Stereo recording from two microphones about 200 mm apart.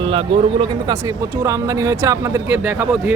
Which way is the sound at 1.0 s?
15° right (ahead or behind).